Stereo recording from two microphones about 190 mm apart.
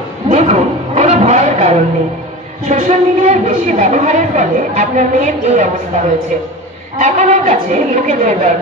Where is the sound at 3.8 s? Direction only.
40° right (ahead or behind).